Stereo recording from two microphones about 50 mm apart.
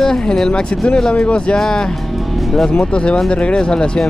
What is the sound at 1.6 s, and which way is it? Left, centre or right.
Speech, centre.